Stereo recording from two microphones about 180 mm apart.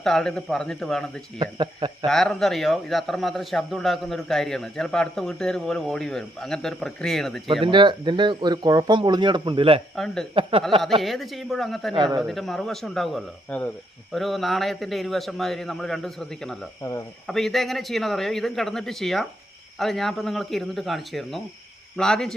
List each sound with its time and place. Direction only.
0.0 s speech: 5° left (ahead or behind)
1.4 s speech: 25° right (ahead or behind)
2.0 s speech: 5° left (ahead or behind)
7.6 s speech: 25° right (ahead or behind)
9.9 s speech: centre (ahead or behind)